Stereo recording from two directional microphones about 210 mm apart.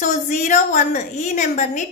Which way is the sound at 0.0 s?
35° left (ahead or behind).